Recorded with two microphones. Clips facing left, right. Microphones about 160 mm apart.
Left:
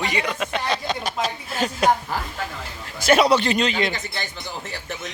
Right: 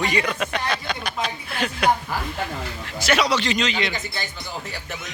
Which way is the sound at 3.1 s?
50° left (ahead or behind).